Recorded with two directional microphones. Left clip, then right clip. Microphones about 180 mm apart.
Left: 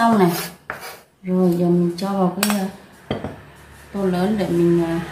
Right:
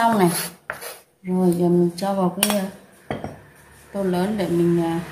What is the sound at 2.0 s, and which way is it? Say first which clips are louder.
Speech: left 1 dB; 45° right (ahead or behind).